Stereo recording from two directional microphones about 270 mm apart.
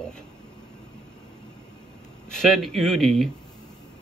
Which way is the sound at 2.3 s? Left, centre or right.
Centre.